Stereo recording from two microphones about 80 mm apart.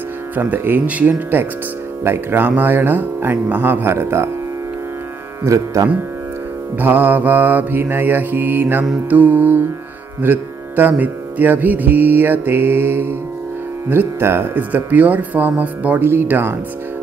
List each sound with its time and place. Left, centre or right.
0.4 s music: right
5.4 s speech: right
6.8 s music: right